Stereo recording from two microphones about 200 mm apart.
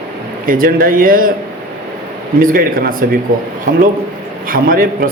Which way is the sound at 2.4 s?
45° right (ahead or behind).